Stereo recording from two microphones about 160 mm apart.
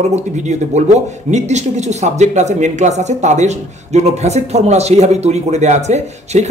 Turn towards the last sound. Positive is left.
turn(degrees=-45)  # may be behind; listen again after turning